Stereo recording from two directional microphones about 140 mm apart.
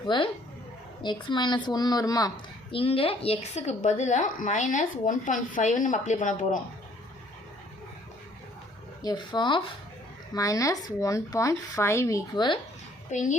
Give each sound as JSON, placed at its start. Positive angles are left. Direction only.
{"t": 0.0, "sound": "a woman's voice", "side_deg": 35}
{"t": 2.7, "sound": "a woman's voice", "side_deg": 40}
{"t": 9.0, "sound": "speech", "side_deg": 35}
{"t": 10.3, "sound": "speech", "side_deg": 25}
{"t": 13.1, "sound": "a child's voice", "side_deg": 60}